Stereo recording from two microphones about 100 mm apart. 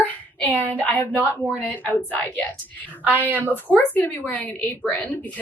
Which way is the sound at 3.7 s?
15° left (ahead or behind).